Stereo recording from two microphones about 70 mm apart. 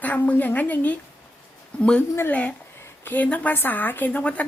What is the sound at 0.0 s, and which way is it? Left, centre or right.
Speech, left.